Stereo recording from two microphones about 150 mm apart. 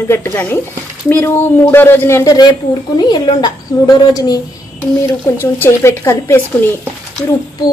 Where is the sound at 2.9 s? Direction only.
30° left (ahead or behind).